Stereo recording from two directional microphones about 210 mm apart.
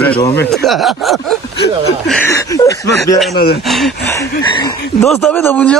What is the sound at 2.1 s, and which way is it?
Speech, 10° left (ahead or behind).